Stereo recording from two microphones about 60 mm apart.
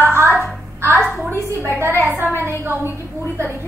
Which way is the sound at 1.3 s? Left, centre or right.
Right.